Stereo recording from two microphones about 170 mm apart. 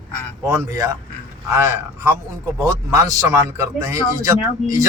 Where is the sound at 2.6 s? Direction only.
20° right (ahead or behind).